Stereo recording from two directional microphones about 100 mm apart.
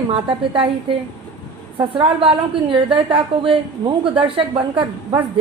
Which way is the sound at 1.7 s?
60° right (ahead or behind).